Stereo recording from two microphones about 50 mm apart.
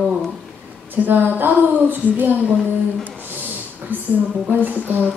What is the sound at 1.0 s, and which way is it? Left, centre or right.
Speech, right.